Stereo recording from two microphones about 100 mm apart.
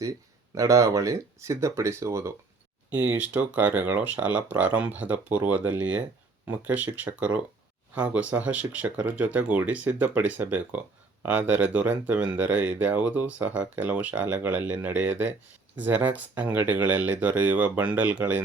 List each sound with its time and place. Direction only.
0.5 s speech: 35° right (ahead or behind)
2.9 s speech: 15° right (ahead or behind)